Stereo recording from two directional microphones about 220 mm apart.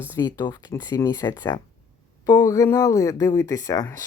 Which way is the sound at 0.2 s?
20° left (ahead or behind).